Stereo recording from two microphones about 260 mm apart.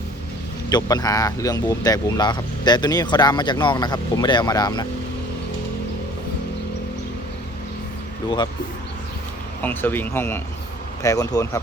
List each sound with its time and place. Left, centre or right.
0.7 s speech: centre
9.6 s speech: centre